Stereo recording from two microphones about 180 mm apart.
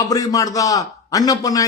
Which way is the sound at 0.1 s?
20° left (ahead or behind).